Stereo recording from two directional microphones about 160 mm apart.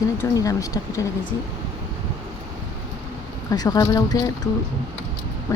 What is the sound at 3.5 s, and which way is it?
Speech, 25° left (ahead or behind).